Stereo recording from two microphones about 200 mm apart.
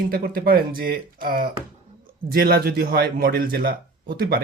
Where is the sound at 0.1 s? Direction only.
50° right (ahead or behind).